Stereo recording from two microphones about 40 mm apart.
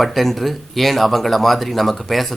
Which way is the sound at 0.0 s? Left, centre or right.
Centre.